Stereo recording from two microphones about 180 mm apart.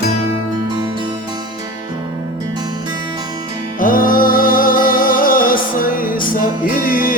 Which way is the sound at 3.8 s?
50° left (ahead or behind).